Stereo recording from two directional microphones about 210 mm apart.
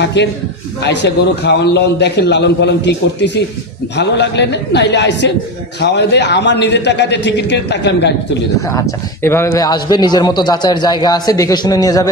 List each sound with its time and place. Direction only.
0.0 s a man's voice: 55° left (ahead or behind)
9.2 s a man's voice: 10° left (ahead or behind)